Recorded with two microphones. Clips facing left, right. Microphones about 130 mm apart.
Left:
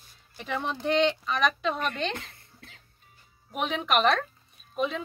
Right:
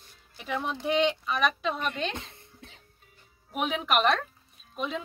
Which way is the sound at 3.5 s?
5° right (ahead or behind).